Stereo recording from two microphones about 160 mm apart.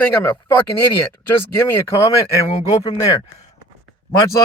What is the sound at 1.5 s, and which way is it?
A man's voice, 15° left (ahead or behind).